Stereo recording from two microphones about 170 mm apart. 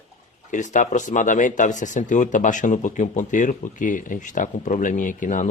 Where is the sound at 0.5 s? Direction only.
45° left (ahead or behind).